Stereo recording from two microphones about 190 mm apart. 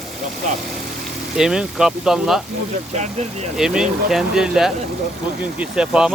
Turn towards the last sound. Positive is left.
turn(degrees=-5)  # may be behind; listen again after turning